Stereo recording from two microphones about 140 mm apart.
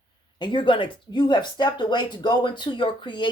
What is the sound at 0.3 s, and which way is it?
Speech, 35° left (ahead or behind).